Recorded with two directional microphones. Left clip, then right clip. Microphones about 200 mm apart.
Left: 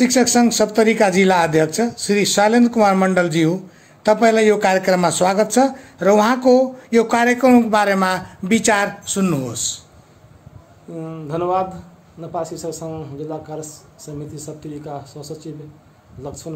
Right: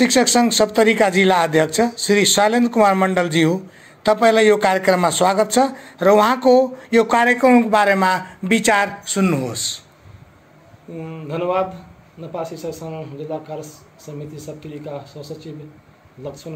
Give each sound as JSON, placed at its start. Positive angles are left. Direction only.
{"t": 0.0, "sound": "speech", "side_deg": 10}
{"t": 11.0, "sound": "speech", "side_deg": 25}